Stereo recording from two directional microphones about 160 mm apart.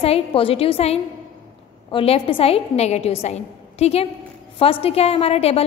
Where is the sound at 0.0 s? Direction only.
35° left (ahead or behind).